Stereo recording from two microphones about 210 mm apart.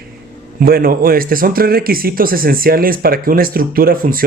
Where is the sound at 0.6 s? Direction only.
45° right (ahead or behind).